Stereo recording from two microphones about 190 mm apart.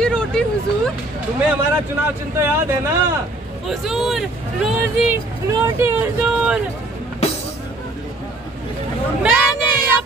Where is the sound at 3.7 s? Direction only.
Centre (ahead or behind).